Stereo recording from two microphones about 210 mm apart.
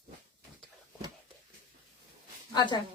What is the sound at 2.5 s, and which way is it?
Speech, 20° left (ahead or behind).